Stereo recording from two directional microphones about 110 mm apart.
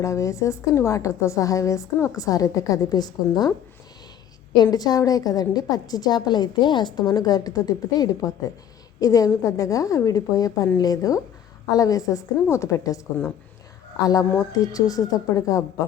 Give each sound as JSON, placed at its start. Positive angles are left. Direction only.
{"t": 0.0, "sound": "a woman's voice", "side_deg": 30}
{"t": 4.5, "sound": "a woman's voice", "side_deg": 40}
{"t": 14.0, "sound": "a woman's voice", "side_deg": 35}